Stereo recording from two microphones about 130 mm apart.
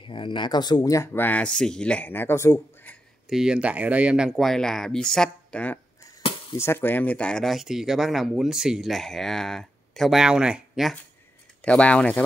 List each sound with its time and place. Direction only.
0.0 s speech: 40° left (ahead or behind); by 3.0 s 15° left (ahead or behind)
3.3 s speech: 5° right (ahead or behind)
11.6 s speech: 10° left (ahead or behind)